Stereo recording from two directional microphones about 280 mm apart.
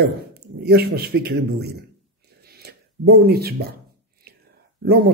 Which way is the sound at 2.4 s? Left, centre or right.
Right.